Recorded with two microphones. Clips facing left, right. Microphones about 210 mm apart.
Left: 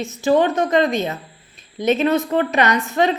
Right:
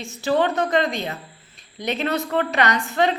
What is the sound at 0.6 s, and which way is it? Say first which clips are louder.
Speech: left 4 dB; 20° left (ahead or behind).